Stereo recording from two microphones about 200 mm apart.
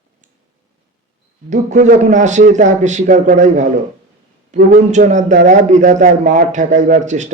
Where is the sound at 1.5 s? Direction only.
40° right (ahead or behind).